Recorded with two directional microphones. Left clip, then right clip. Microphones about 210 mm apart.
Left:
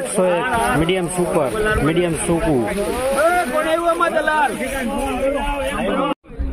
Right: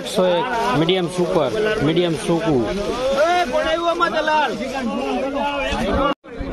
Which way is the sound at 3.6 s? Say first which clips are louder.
Left 1 dB; 30° left (ahead or behind).